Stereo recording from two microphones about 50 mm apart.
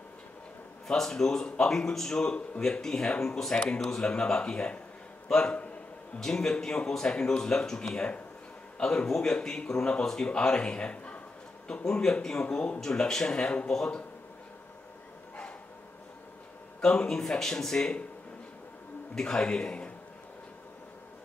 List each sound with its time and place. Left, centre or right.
0.8 s speech: centre
6.1 s speech: centre
16.8 s speech: centre
19.1 s speech: centre